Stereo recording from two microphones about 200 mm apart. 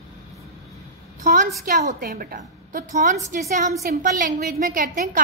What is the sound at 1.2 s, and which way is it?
A woman's voice, 40° right (ahead or behind).